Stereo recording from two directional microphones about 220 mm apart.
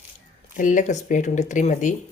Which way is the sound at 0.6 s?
35° left (ahead or behind).